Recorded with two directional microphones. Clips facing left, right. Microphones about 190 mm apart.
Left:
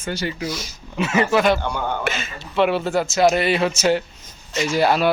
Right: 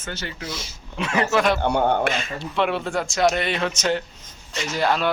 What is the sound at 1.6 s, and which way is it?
Speech, 55° right (ahead or behind).